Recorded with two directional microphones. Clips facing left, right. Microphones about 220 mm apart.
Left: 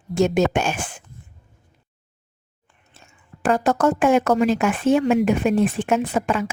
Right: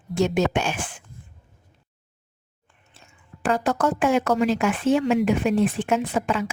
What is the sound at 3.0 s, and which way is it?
A woman's voice, 45° left (ahead or behind).